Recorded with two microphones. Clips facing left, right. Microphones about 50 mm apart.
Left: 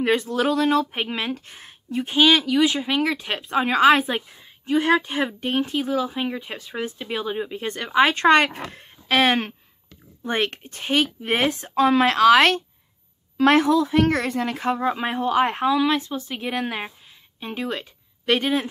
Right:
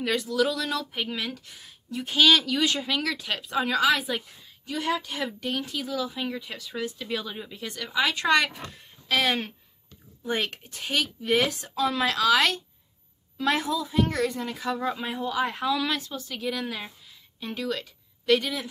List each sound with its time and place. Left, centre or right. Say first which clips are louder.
0.0 s speech: left 4 dB; left
2.0 s speech: left 3 dB; left
11.7 s speech: left 10 dB; left
13.4 s speech: left 9 dB; left
14.8 s speech: left 6 dB; left
15.0 s speech: left 10 dB; left
15.6 s speech: left 7 dB; left
17.4 s speech: left 2 dB; left